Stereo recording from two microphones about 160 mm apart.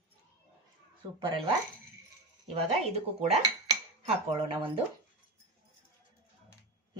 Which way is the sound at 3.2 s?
40° right (ahead or behind).